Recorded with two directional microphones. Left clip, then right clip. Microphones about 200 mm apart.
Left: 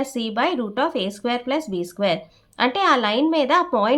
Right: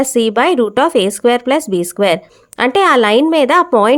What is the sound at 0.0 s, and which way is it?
Speech, 50° right (ahead or behind).